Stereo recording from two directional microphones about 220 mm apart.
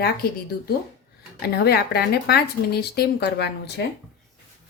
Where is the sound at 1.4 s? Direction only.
45° left (ahead or behind).